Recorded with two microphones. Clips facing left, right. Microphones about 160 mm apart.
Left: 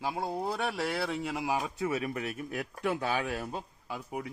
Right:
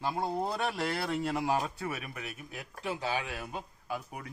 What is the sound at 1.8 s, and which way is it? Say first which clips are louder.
Speech: left 6 dB; 25° left (ahead or behind).